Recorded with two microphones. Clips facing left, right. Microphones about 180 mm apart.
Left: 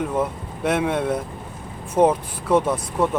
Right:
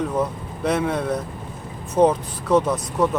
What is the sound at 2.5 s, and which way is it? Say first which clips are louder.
Speech: right 1 dB; 30° left (ahead or behind).